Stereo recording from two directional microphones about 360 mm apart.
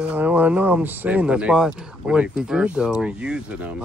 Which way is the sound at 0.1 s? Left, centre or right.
Centre.